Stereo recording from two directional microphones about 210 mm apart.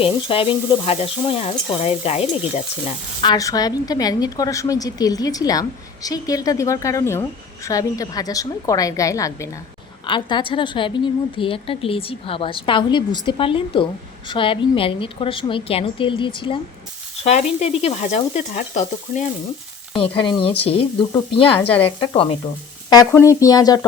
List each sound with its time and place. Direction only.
0.0 s a woman's voice: 25° left (ahead or behind)
3.2 s a woman's voice: 20° left (ahead or behind)